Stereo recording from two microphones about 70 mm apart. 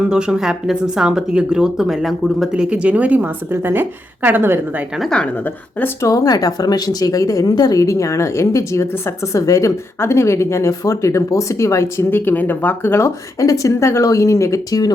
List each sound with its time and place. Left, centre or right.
0.1 s speech: centre
2.5 s a woman's voice: centre
5.1 s speech: centre
6.0 s speech: left
12.1 s speech: left
13.4 s speech: left